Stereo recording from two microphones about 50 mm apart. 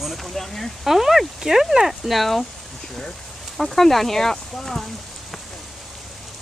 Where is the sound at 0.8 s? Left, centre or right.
Centre.